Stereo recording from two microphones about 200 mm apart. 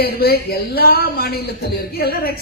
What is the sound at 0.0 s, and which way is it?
A man's voice, 50° left (ahead or behind).